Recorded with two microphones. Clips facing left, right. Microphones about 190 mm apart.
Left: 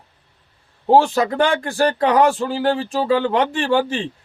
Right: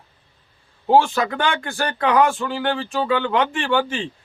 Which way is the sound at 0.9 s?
35° left (ahead or behind).